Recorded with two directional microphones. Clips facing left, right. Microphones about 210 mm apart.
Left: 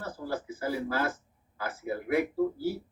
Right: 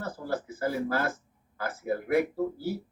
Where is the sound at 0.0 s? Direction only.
50° right (ahead or behind).